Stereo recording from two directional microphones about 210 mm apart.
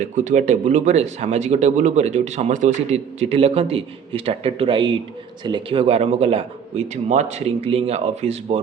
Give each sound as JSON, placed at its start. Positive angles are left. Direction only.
{"t": 0.0, "sound": "a man's voice", "side_deg": -35}